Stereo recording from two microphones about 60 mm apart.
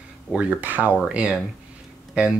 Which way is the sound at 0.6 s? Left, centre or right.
Right.